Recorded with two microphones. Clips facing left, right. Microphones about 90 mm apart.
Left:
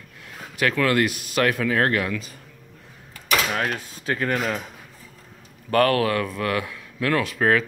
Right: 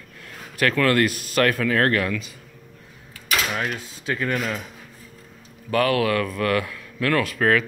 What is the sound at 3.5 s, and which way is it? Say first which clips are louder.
Speech: left 1 dB; 45° left (ahead or behind).